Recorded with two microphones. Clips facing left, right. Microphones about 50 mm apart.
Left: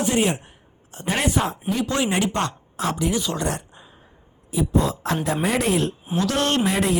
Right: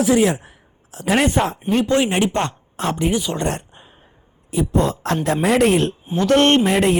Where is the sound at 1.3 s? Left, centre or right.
Right.